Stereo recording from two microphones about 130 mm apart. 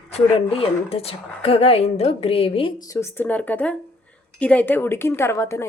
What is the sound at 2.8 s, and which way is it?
A woman's voice, 25° left (ahead or behind).